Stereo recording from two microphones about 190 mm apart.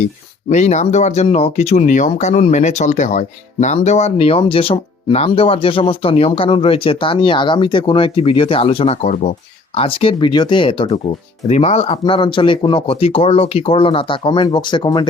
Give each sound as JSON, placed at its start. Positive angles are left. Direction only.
{"t": 0.5, "sound": "speech", "side_deg": 35}